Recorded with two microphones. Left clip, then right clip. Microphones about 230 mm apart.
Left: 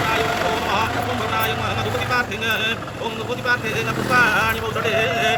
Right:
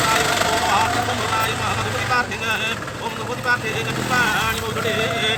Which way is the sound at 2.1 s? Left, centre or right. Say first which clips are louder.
Even; centre.